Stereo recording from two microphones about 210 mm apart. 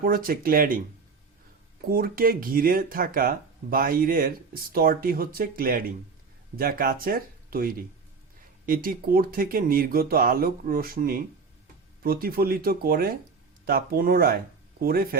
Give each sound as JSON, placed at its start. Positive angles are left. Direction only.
{"t": 0.0, "sound": "speech", "side_deg": -45}
{"t": 1.9, "sound": "speech", "side_deg": -45}